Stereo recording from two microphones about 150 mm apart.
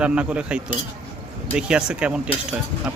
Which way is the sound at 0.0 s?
10° right (ahead or behind).